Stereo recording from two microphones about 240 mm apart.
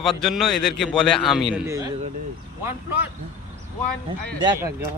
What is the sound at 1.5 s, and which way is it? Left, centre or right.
Speech, centre.